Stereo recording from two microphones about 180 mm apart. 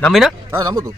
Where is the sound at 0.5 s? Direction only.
20° right (ahead or behind).